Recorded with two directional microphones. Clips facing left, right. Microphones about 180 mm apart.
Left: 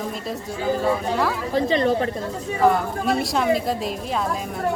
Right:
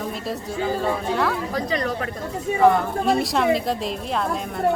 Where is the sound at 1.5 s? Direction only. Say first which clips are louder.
Left 5 dB; 25° left (ahead or behind).